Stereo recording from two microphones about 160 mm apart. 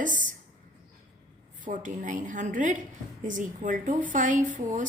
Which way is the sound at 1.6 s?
50° right (ahead or behind).